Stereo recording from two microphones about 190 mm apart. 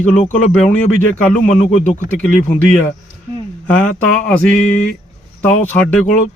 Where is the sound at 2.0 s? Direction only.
5° left (ahead or behind).